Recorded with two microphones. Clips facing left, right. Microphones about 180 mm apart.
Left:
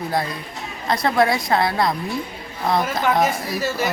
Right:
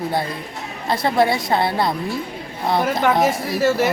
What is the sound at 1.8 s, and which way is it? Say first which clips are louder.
A woman's voice: even; centre (ahead or behind).